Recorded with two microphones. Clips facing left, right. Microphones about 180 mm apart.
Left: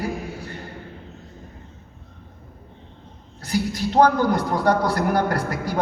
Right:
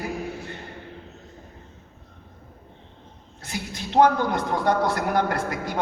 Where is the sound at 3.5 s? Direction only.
25° right (ahead or behind).